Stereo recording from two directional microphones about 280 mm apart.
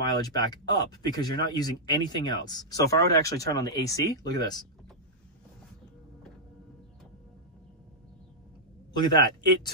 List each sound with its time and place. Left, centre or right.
0.2 s speech: centre
8.9 s speech: centre